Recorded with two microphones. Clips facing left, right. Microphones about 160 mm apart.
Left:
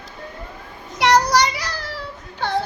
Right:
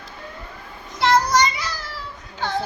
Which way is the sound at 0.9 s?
70° left (ahead or behind).